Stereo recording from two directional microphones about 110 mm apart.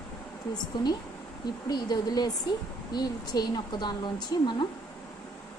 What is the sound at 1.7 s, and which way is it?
Speech, 35° left (ahead or behind).